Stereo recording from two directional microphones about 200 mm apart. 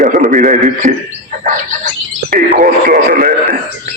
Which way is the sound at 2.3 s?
45° right (ahead or behind).